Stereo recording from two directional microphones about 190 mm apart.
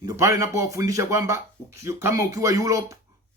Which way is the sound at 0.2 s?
15° right (ahead or behind).